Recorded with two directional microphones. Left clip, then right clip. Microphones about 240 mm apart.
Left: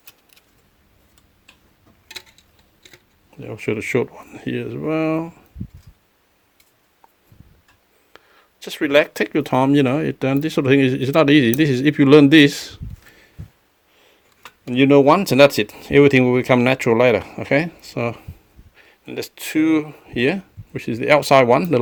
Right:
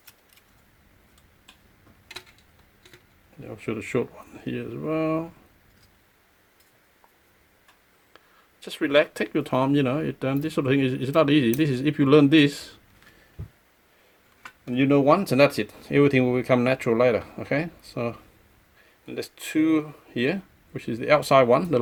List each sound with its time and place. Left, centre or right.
3.4 s speech: left
8.1 s whispering: left
8.6 s speech: left
14.6 s speech: left